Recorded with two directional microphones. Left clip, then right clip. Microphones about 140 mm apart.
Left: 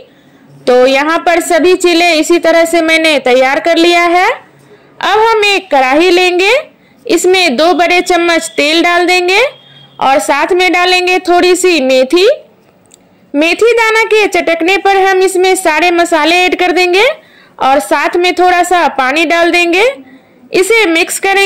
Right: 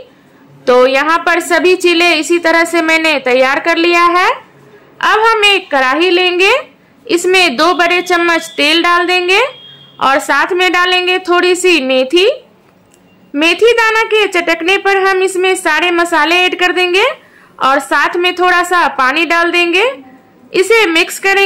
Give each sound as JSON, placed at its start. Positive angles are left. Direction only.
{"t": 0.7, "sound": "speech", "side_deg": 25}
{"t": 13.4, "sound": "a woman's voice", "side_deg": 25}